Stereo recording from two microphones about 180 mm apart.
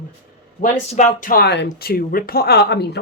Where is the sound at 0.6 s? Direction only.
40° left (ahead or behind); by 3.0 s 65° left (ahead or behind).